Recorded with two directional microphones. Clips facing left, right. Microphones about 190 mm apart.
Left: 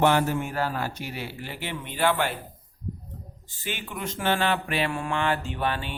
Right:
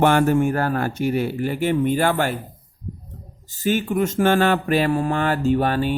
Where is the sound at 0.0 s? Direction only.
55° right (ahead or behind).